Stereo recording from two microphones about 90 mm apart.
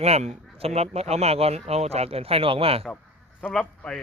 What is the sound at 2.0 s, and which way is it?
Speech, 90° right.